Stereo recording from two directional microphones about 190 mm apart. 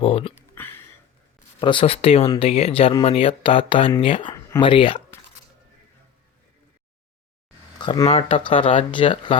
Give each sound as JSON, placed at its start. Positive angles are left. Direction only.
{"t": 0.0, "sound": "speech", "side_deg": 30}
{"t": 0.6, "sound": "a sound", "side_deg": 10}
{"t": 1.5, "sound": "speech", "side_deg": 25}
{"t": 7.8, "sound": "speech", "side_deg": 25}